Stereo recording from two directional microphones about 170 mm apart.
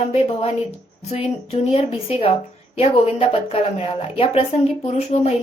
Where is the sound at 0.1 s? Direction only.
35° left (ahead or behind).